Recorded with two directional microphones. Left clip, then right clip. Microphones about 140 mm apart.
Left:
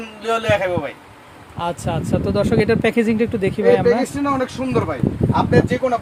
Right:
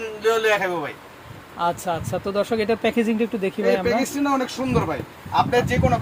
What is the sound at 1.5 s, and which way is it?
Speech, 20° left (ahead or behind).